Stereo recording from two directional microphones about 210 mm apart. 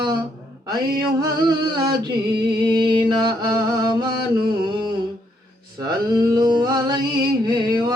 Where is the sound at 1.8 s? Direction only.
45° right (ahead or behind).